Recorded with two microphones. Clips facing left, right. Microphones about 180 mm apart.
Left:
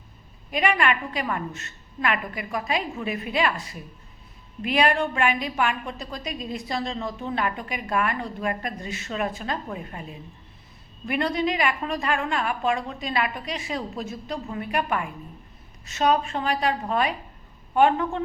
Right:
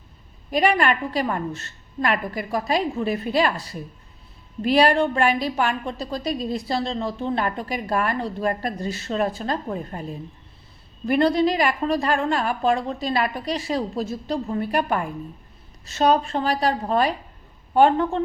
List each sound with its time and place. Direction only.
0.5 s a woman's voice: 35° right (ahead or behind)